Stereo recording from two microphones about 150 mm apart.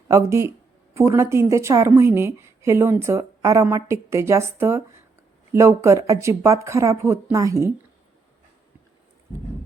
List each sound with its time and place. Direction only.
0.1 s a woman's voice: 20° right (ahead or behind)